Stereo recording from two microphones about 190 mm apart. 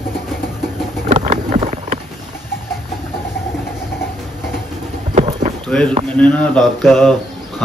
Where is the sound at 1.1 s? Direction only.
35° right (ahead or behind).